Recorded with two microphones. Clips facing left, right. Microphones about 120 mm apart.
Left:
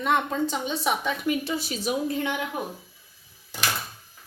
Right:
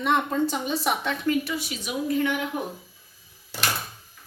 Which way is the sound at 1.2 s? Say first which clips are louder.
Right 1 dB; 25° left (ahead or behind).